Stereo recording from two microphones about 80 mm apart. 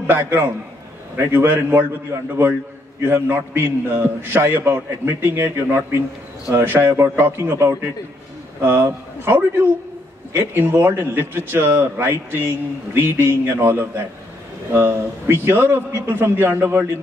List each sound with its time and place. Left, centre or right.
0.0 s a man's voice: right